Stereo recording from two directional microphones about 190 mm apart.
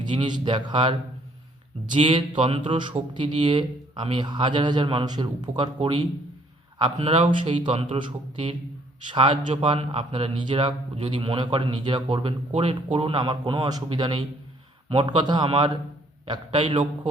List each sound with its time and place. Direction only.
0.0 s a man's voice: 25° right (ahead or behind)